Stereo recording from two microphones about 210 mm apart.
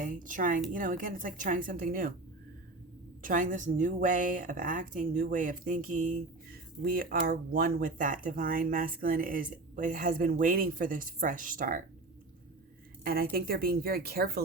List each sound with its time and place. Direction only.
0.0 s a woman's voice: 40° right (ahead or behind)
3.2 s a woman's voice: 40° right (ahead or behind)
13.3 s speech: 45° right (ahead or behind)